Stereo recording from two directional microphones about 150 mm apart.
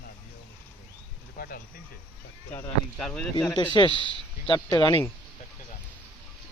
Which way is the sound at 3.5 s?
30° left (ahead or behind).